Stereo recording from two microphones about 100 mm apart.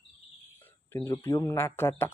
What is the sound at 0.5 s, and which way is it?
Cricket, 20° left (ahead or behind).